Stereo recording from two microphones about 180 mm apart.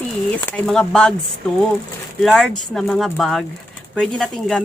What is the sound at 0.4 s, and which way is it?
Speech, 5° left (ahead or behind).